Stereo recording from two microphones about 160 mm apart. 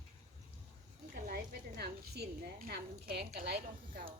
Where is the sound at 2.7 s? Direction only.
90° right.